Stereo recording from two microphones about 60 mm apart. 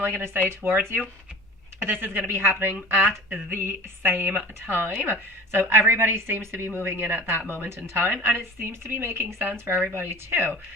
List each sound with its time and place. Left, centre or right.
0.0 s a woman's voice: right